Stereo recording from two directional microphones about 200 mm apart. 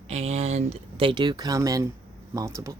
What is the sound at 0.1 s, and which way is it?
Speech, 30° right (ahead or behind).